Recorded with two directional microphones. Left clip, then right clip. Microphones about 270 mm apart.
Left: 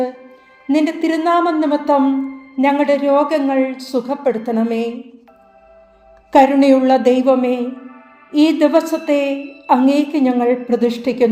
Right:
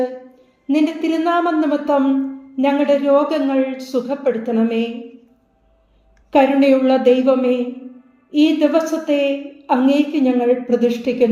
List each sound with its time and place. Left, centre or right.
0.7 s a woman's voice: left
6.3 s a woman's voice: left